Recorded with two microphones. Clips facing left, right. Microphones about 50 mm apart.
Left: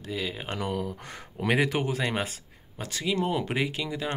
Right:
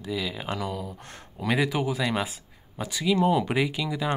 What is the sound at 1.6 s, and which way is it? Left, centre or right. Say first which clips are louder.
Speech: right 1 dB; left.